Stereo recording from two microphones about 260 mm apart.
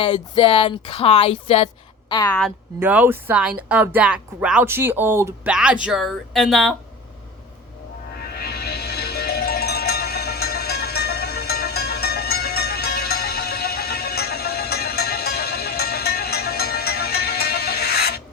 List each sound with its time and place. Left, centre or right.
0.0 s speech: centre
2.8 s speech: centre
8.4 s music: left